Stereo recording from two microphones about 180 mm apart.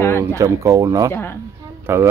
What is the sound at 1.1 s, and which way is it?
Speech, 10° left (ahead or behind).